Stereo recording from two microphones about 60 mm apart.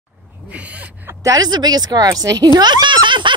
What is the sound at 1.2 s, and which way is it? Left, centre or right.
Speech, right.